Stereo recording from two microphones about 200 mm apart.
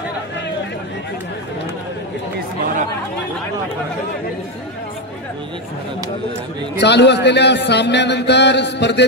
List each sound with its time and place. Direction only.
6.8 s a man's voice: 60° left (ahead or behind)